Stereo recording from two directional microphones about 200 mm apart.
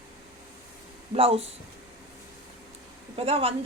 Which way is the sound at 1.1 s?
30° right (ahead or behind).